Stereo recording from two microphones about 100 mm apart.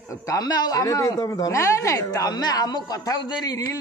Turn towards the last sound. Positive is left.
turn(degrees=40)  # may be behind; listen again after turning